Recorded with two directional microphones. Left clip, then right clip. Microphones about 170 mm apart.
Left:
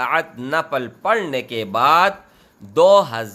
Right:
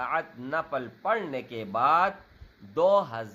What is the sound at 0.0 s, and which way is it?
A man's voice, 30° left (ahead or behind).